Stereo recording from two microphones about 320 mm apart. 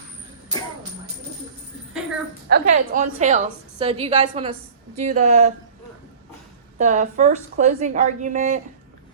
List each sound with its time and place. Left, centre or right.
2.5 s a woman's voice: right
6.7 s a woman's voice: right